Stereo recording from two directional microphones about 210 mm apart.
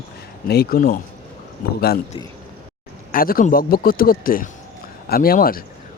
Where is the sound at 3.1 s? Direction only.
45° left (ahead or behind).